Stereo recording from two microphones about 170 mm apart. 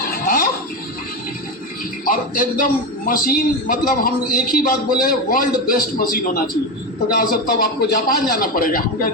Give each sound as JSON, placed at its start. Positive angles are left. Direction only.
{"t": 2.0, "sound": "a man's voice", "side_deg": 55}